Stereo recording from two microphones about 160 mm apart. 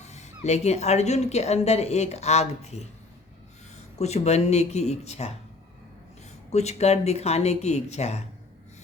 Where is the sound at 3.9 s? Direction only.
40° left (ahead or behind).